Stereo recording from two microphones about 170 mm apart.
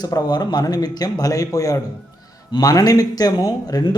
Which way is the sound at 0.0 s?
25° left (ahead or behind).